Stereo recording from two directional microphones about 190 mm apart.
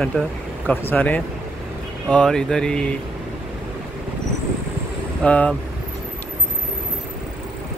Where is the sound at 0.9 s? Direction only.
10° left (ahead or behind).